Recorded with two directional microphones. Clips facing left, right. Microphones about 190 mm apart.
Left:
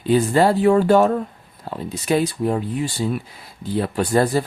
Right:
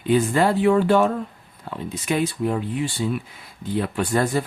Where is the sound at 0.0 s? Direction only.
35° left (ahead or behind).